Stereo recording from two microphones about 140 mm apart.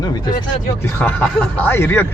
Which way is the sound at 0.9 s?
10° left (ahead or behind).